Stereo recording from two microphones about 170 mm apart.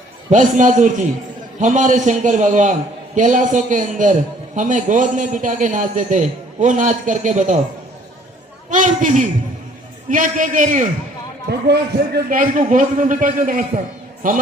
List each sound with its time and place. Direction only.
0.3 s a man's voice: 45° right (ahead or behind)
8.7 s a man's voice: 45° right (ahead or behind)
11.4 s a man's voice: 70° right (ahead or behind); by 14.3 s 50° right (ahead or behind)